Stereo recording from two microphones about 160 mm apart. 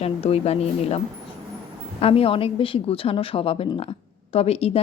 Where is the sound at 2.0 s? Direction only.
35° left (ahead or behind).